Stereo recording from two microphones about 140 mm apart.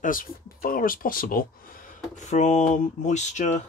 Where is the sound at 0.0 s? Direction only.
85° left.